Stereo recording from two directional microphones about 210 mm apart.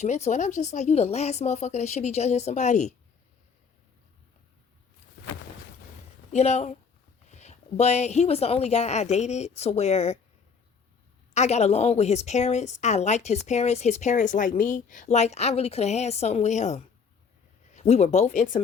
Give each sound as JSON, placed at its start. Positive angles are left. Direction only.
{"t": 0.0, "sound": "a woman's voice", "side_deg": 35}
{"t": 6.3, "sound": "a woman's voice", "side_deg": 30}
{"t": 11.3, "sound": "a woman's voice", "side_deg": 30}